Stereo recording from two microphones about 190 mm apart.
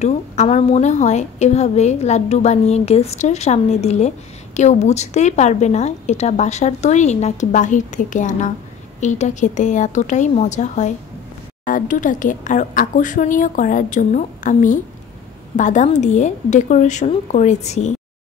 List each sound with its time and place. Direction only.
0.0 s a woman's voice: 35° left (ahead or behind)